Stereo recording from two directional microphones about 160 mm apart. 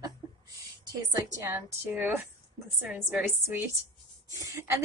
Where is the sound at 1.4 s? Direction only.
10° right (ahead or behind).